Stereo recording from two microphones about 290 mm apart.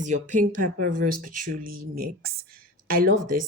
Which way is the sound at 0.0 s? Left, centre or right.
Right.